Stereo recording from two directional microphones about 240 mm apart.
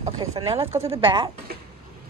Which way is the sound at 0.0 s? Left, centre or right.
Right.